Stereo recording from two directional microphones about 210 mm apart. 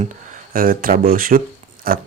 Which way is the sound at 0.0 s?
40° right (ahead or behind).